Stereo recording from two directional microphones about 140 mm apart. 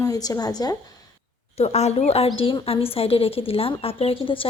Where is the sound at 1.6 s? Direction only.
50° left (ahead or behind).